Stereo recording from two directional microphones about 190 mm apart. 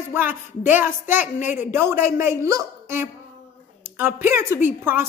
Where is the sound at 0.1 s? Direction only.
10° right (ahead or behind).